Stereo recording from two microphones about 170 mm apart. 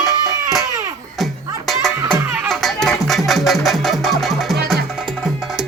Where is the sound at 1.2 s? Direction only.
Centre (ahead or behind).